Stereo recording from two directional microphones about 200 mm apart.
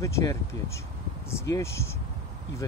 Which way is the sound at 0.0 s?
15° left (ahead or behind).